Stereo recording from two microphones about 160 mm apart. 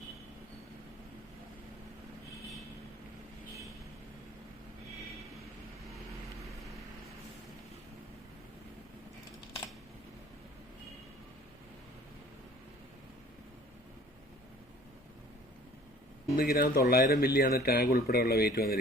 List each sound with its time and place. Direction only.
16.3 s speech: 65° left (ahead or behind)